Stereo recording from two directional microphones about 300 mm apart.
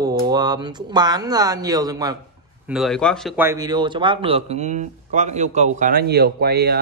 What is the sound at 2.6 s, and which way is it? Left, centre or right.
Speech, centre.